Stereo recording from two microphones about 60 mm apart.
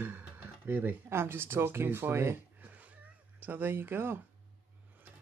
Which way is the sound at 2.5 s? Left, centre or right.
Right.